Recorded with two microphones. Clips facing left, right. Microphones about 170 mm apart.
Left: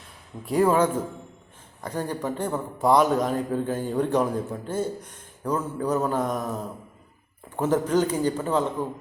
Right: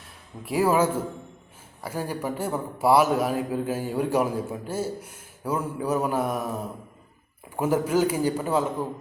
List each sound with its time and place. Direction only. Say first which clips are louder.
0.4 s a man's voice: left 1 dB; 5° right (ahead or behind)